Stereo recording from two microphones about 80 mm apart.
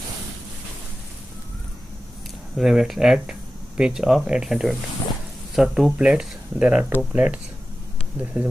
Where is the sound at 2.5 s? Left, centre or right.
Centre.